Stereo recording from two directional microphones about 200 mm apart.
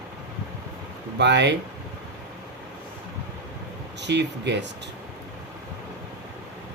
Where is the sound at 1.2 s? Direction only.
60° right (ahead or behind).